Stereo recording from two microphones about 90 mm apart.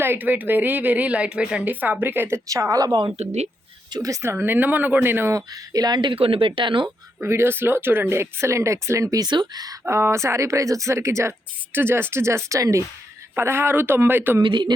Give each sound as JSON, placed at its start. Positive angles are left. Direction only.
{"t": 0.0, "sound": "a woman's voice", "side_deg": -20}
{"t": 2.5, "sound": "speech", "side_deg": -40}
{"t": 3.9, "sound": "speech", "side_deg": -40}
{"t": 4.2, "sound": "a woman's voice", "side_deg": -25}
{"t": 5.3, "sound": "speech", "side_deg": -45}
{"t": 7.2, "sound": "a woman's voice", "side_deg": -25}
{"t": 9.2, "sound": "speech", "side_deg": -55}
{"t": 9.8, "sound": "a woman's voice", "side_deg": -30}
{"t": 14.4, "sound": "speech", "side_deg": -60}